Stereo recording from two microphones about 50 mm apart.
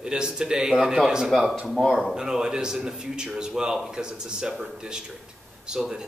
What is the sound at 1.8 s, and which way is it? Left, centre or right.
Speech, centre.